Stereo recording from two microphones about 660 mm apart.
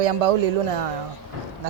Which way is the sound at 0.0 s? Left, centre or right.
Right.